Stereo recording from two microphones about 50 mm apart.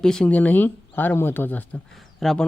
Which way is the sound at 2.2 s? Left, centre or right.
Centre.